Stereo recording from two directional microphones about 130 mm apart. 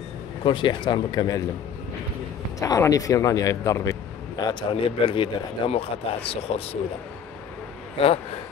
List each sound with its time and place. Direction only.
0.4 s speech: 40° left (ahead or behind)
2.6 s a man's voice: 25° left (ahead or behind); by 6.8 s 50° left (ahead or behind)
8.0 s a man's voice: 45° left (ahead or behind)